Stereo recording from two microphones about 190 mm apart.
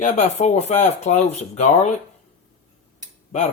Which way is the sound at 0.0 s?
35° left (ahead or behind).